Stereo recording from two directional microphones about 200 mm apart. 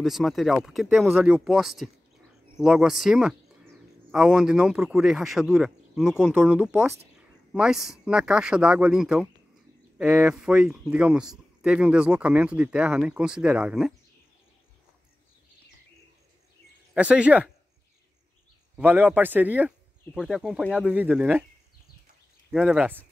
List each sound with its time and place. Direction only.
0.0 s a man's voice: centre (ahead or behind)
16.9 s a man's voice: 5° right (ahead or behind)
18.8 s a man's voice: 10° right (ahead or behind)
22.5 s speech: 5° right (ahead or behind)